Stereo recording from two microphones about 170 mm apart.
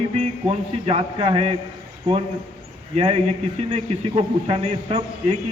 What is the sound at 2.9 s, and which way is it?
A man's voice, 40° right (ahead or behind).